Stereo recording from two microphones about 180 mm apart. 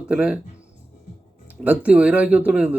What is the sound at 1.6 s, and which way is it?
Speech, 5° right (ahead or behind).